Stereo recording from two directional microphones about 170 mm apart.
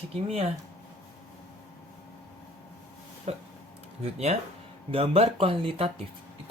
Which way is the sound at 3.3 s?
40° right (ahead or behind).